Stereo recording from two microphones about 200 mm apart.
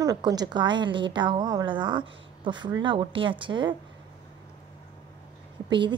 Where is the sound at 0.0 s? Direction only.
20° right (ahead or behind).